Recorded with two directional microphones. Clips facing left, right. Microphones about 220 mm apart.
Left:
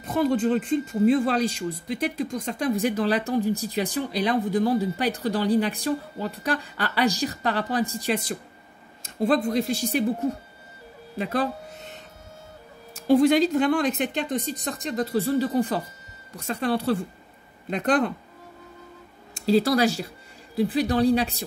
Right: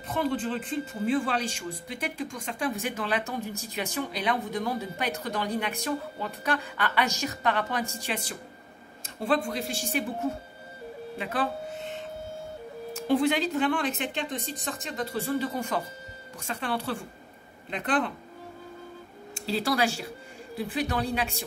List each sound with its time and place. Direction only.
0.1 s speech: 45° left (ahead or behind)
13.1 s speech: 40° left (ahead or behind)
19.3 s speech: 40° left (ahead or behind)